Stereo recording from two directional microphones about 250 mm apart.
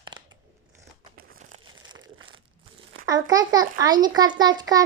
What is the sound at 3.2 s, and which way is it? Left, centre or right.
A child's voice, centre.